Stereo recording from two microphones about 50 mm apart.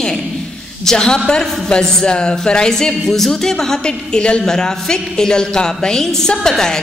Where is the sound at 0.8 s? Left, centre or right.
Centre.